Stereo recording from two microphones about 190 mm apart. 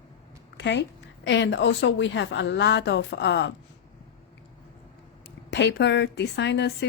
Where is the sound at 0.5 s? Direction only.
65° left (ahead or behind).